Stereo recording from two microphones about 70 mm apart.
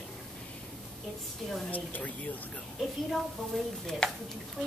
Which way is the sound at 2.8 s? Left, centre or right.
Centre.